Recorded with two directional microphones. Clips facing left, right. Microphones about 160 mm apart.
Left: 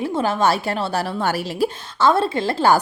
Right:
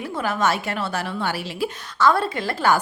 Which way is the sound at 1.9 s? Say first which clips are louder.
Left 2 dB; 30° left (ahead or behind).